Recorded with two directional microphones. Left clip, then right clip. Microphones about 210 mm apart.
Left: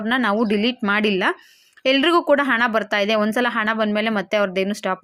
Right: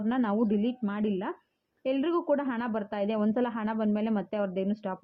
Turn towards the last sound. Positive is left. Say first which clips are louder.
# left 11 dB
turn(degrees=15)  # may be behind; listen again after turning